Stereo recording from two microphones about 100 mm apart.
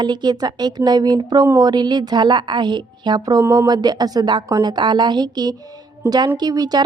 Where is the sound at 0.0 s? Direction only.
45° right (ahead or behind).